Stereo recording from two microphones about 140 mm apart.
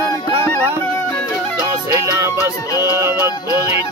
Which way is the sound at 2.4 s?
25° left (ahead or behind).